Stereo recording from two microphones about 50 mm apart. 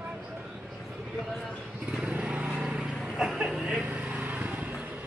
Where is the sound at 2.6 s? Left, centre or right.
Centre.